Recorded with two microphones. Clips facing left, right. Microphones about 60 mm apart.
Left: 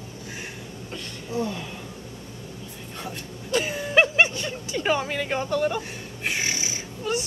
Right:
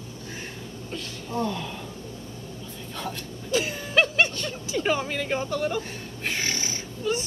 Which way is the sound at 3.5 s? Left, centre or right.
Centre.